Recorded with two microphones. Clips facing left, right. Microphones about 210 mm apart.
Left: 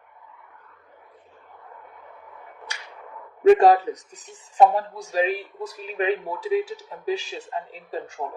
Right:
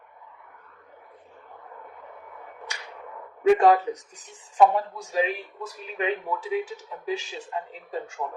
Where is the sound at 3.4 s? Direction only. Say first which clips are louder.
Left 3 dB; 35° left (ahead or behind).